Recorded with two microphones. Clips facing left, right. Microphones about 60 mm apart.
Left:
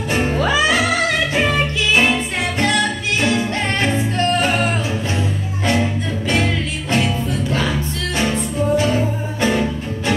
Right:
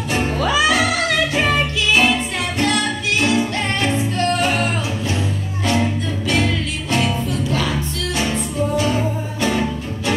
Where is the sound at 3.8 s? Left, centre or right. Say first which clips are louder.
Left 1 dB; left.